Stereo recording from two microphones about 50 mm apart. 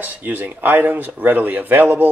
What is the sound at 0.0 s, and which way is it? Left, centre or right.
Speech, right.